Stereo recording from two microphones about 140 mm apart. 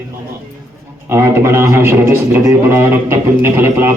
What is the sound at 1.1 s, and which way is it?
Speech, 20° right (ahead or behind).